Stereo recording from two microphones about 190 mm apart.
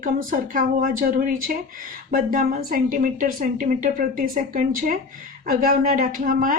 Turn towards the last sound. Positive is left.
turn(degrees=-45)  # may be behind; listen again after turning